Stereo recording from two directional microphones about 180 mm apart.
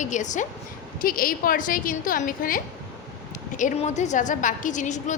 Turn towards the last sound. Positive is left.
turn(degrees=45)  # may be behind; listen again after turning